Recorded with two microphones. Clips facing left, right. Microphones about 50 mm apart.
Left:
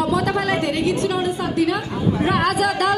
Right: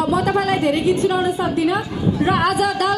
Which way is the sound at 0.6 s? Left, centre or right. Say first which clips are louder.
Right 3 dB; centre.